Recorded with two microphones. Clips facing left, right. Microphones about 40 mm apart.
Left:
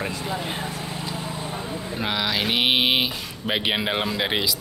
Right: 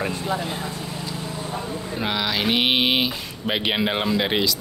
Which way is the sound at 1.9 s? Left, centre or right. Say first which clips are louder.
Right 1 dB; centre.